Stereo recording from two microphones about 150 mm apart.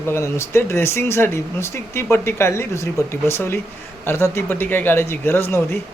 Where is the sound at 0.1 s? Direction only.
15° left (ahead or behind).